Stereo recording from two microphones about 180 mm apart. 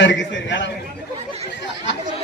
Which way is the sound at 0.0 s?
80° left.